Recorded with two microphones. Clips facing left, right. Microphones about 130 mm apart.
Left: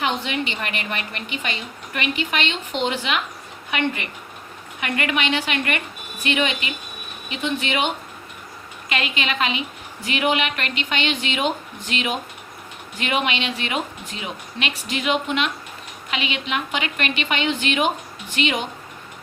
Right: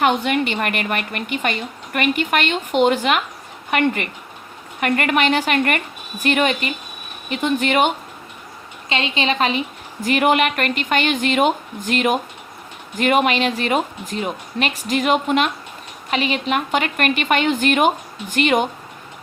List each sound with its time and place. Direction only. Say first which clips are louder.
0.0 s a woman's voice: right 6 dB; 50° right (ahead or behind)
8.9 s a woman's voice: right 4 dB; 30° right (ahead or behind); by 18.7 s 50° right (ahead or behind)